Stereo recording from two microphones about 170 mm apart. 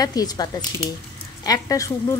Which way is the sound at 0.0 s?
20° left (ahead or behind).